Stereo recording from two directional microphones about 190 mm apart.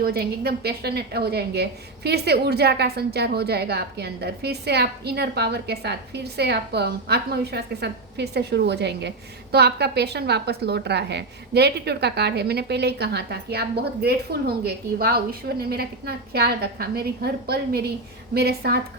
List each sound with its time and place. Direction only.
0.0 s a woman's voice: 55° right (ahead or behind)